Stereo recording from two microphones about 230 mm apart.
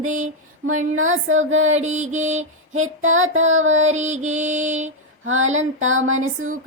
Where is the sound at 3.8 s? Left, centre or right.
Right.